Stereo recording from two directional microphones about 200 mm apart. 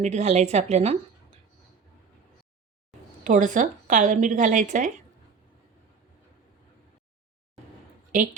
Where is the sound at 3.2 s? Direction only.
40° right (ahead or behind).